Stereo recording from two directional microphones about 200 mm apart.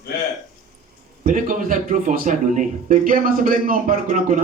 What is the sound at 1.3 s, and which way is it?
A man's voice, 40° right (ahead or behind).